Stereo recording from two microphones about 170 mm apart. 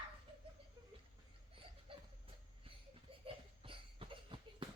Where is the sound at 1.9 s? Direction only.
35° right (ahead or behind).